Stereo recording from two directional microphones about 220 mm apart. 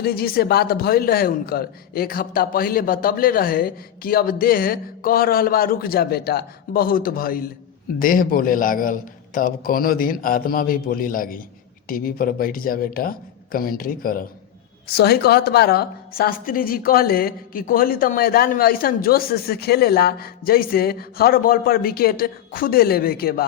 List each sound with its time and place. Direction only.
0.0 s a woman's voice: 45° left (ahead or behind)